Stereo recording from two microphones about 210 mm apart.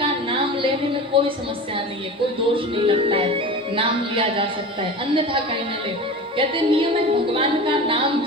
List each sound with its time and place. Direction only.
0.0 s music: 25° right (ahead or behind)
1.1 s speech: 25° right (ahead or behind)
2.5 s speech: 25° right (ahead or behind)